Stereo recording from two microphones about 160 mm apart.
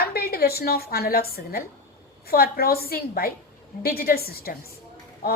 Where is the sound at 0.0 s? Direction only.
70° left (ahead or behind).